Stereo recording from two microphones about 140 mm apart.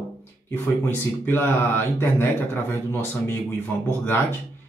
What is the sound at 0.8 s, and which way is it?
Speech, 15° left (ahead or behind).